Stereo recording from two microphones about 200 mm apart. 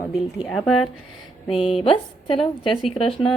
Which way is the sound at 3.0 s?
25° left (ahead or behind).